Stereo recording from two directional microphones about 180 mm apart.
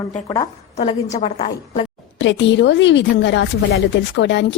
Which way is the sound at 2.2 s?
85° left.